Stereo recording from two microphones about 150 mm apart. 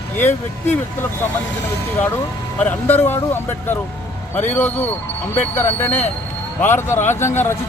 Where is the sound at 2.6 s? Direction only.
15° left (ahead or behind).